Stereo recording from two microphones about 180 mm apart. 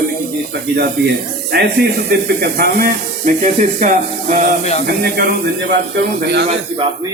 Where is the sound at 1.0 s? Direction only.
65° right (ahead or behind); by 3.8 s 45° right (ahead or behind).